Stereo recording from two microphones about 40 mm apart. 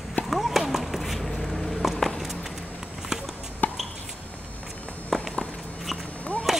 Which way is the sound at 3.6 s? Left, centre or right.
Left.